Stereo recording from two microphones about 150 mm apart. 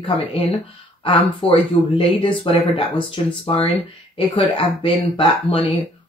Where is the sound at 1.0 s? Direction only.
35° left (ahead or behind).